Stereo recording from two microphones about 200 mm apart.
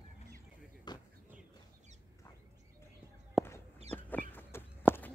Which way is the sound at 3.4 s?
Centre (ahead or behind).